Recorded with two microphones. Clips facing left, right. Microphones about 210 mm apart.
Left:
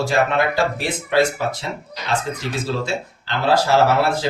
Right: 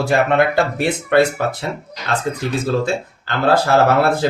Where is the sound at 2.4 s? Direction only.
55° right (ahead or behind).